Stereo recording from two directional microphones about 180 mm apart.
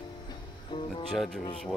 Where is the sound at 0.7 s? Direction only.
30° left (ahead or behind).